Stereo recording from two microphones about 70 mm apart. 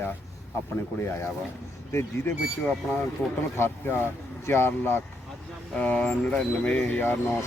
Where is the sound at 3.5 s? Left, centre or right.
Left.